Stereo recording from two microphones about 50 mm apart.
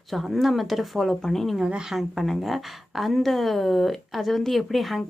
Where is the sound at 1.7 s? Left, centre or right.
Centre.